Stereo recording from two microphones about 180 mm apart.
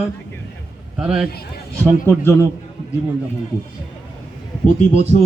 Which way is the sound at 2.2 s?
10° left (ahead or behind).